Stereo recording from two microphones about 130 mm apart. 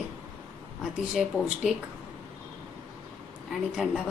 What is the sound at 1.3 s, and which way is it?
Speech, 15° right (ahead or behind).